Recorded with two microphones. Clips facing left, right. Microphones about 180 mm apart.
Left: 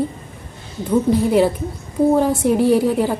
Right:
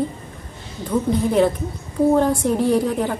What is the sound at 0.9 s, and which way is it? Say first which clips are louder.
Speech: left 3 dB; 10° left (ahead or behind).